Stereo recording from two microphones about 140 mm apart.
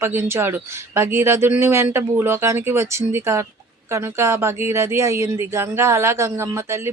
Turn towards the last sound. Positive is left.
turn(degrees=-20)  # may be behind; listen again after turning